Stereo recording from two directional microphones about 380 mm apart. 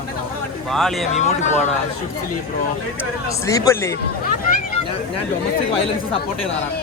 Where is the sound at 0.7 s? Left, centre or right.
Centre.